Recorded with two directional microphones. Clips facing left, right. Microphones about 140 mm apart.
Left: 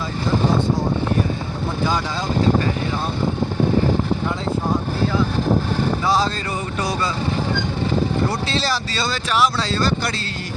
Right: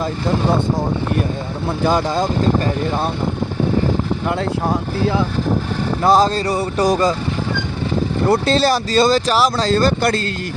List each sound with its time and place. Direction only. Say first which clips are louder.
1.9 s speech: right 6 dB; 50° right (ahead or behind)
6.0 s speech: right 6 dB; 50° right (ahead or behind)
8.3 s speech: right 8 dB; 50° right (ahead or behind)